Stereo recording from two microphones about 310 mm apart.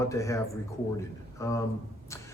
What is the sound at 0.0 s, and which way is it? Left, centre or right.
A man's voice, centre.